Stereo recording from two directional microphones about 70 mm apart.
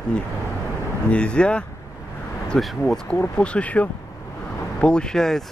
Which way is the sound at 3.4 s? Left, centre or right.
Centre.